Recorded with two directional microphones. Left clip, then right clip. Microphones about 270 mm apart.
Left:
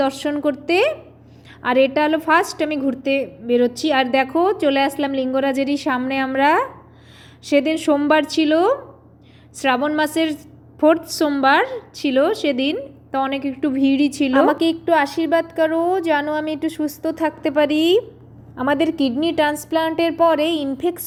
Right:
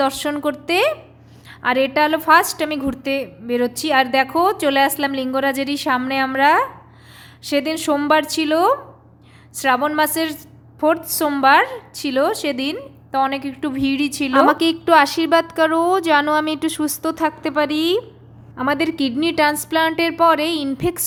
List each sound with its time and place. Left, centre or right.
0.0 s a woman's voice: centre